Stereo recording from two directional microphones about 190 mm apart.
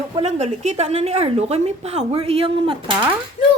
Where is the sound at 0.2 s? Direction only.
35° right (ahead or behind).